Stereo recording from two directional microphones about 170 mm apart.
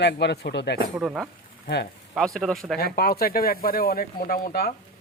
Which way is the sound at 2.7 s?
65° left (ahead or behind).